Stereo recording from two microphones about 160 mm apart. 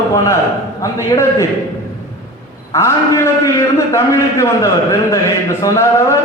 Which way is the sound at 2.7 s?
20° left (ahead or behind).